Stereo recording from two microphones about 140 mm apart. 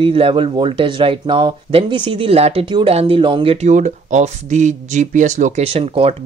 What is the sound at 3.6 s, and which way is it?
Speech, 60° right (ahead or behind).